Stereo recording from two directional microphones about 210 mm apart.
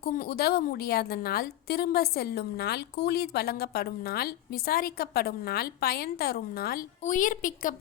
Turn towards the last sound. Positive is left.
turn(degrees=40)  # may be behind; listen again after turning